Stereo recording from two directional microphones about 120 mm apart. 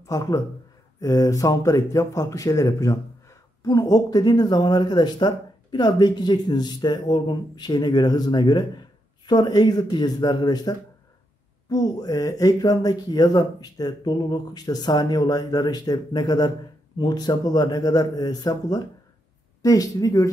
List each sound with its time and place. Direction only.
0.0 s speech: 30° left (ahead or behind)